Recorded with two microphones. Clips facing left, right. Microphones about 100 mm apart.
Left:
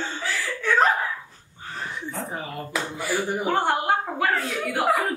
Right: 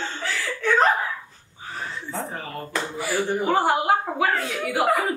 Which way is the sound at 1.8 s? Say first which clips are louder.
Left 1 dB; 15° left (ahead or behind).